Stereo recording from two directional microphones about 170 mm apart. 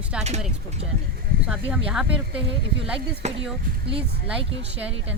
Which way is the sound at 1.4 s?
5° right (ahead or behind).